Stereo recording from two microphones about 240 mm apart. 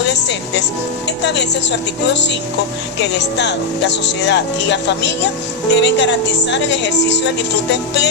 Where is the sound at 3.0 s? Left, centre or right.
Left.